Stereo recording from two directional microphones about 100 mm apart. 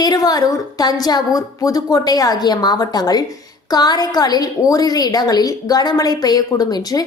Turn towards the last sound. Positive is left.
turn(degrees=40)  # may be behind; listen again after turning